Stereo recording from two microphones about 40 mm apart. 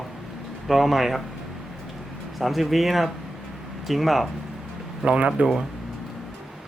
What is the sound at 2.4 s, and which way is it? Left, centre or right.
Speech, centre.